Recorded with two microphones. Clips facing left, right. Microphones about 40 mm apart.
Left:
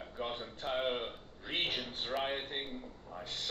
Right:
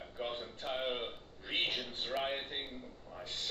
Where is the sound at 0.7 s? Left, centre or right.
Centre.